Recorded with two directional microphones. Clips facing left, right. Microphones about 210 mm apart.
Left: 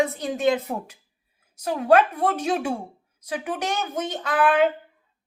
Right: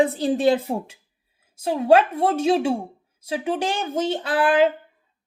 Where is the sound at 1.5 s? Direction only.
25° right (ahead or behind).